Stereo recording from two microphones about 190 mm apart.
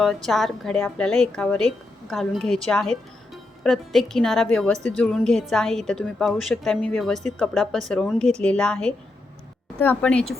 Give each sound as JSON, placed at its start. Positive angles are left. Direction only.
{"t": 0.0, "sound": "a woman's voice", "side_deg": 0}